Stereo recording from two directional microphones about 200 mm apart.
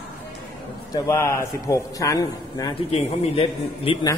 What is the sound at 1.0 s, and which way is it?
A man's voice, 15° left (ahead or behind).